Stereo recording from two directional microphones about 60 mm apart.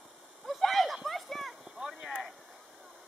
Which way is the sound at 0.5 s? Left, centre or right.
Centre.